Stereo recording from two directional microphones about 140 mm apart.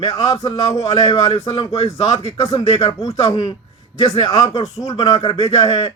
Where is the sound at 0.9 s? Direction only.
40° left (ahead or behind).